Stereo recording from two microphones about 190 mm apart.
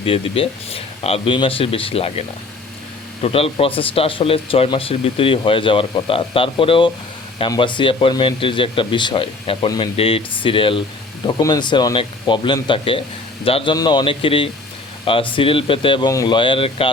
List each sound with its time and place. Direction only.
0.0 s speech: 30° left (ahead or behind)